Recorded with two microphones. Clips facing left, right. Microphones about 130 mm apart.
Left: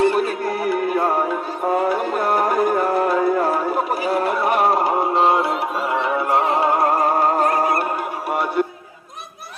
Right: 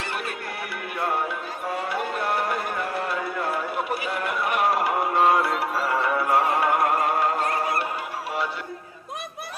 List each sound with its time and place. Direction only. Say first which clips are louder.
0.0 s music: left 14 dB; 35° left (ahead or behind); by 8.6 s 55° left (ahead or behind)